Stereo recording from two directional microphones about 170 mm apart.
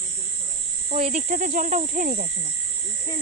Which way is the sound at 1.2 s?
50° right (ahead or behind).